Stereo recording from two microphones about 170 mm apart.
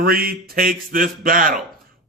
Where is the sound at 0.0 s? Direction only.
60° right (ahead or behind).